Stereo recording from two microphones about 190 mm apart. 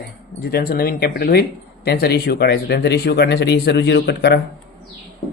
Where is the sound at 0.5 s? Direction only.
55° left (ahead or behind).